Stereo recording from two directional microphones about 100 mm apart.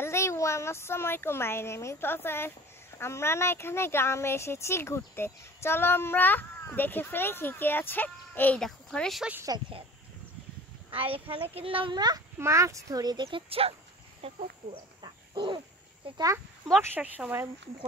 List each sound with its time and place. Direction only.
0.0 s speech: 25° left (ahead or behind)
8.5 s speech: 5° left (ahead or behind)
9.5 s a child's voice: 45° right (ahead or behind)
10.9 s speech: 70° right (ahead or behind)
11.9 s a child's voice: 45° right (ahead or behind)
12.4 s a child's voice: 30° right (ahead or behind); by 13.7 s 70° right (ahead or behind)
14.2 s a sound: 50° right (ahead or behind)
16.2 s a child's voice: 35° right (ahead or behind)
16.9 s speech: 15° right (ahead or behind)